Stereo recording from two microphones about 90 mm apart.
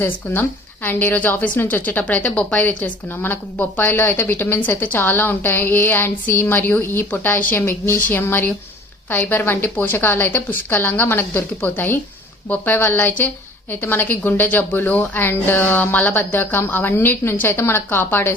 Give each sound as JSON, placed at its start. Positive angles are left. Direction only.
{"t": 0.9, "sound": "a woman's voice", "side_deg": 20}